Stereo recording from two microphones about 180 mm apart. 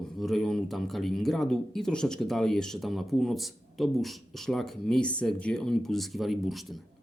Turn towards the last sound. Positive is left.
turn(degrees=0)  # may be behind; listen again after turning